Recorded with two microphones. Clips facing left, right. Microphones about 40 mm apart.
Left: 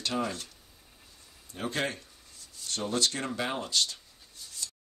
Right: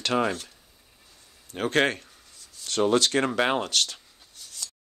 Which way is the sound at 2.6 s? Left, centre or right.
Right.